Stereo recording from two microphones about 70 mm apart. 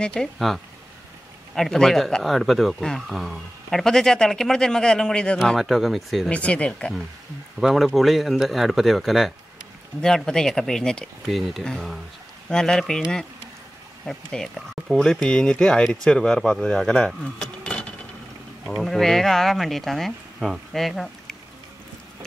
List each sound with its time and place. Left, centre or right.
0.0 s speech: centre
1.5 s speech: centre
5.6 s speech: centre
6.3 s speech: centre
7.6 s speech: centre
11.2 s speech: centre
12.4 s speech: centre
14.0 s speech: centre
16.6 s keys jangling: centre
18.8 s speech: centre